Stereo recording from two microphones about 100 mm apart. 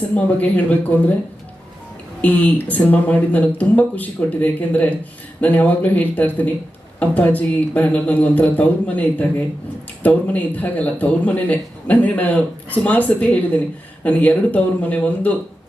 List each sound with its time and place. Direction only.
0.1 s a man's voice: 15° left (ahead or behind)
2.2 s a man's voice: 15° left (ahead or behind)